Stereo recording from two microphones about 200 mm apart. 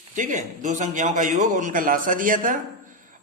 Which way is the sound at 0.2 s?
40° right (ahead or behind).